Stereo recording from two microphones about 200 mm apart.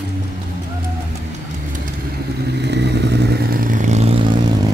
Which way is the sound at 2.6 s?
60° right (ahead or behind).